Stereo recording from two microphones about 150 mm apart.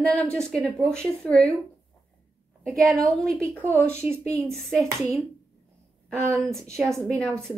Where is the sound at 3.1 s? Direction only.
5° left (ahead or behind).